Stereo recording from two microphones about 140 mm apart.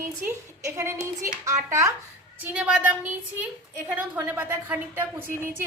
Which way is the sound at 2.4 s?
10° right (ahead or behind).